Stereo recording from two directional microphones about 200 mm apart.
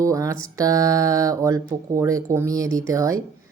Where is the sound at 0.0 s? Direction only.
15° right (ahead or behind).